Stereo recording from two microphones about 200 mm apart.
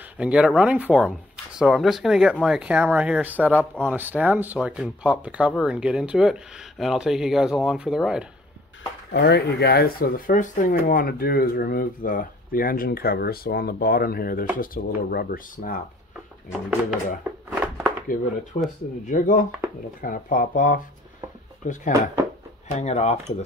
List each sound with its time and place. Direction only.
0.2 s speech: 5° right (ahead or behind)
9.1 s speech: 55° left (ahead or behind)
17.5 s a sound: 5° right (ahead or behind)
18.5 s speech: 35° left (ahead or behind)